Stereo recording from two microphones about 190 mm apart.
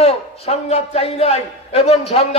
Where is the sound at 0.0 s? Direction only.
30° left (ahead or behind).